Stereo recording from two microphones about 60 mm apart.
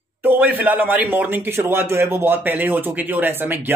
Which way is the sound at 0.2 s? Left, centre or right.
Right.